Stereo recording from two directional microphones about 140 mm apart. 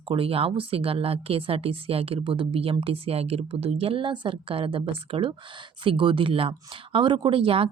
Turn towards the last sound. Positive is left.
turn(degrees=-40)  # may be behind; listen again after turning